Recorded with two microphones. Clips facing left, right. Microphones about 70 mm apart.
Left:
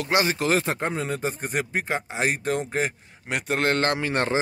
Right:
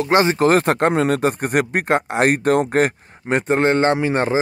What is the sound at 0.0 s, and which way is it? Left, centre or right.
Speech, right.